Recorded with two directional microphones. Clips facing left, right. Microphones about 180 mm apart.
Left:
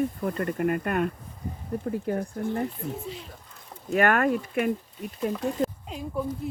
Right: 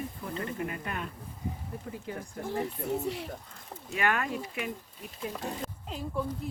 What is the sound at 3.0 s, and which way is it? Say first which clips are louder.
Speech: right 4 dB; 65° right (ahead or behind).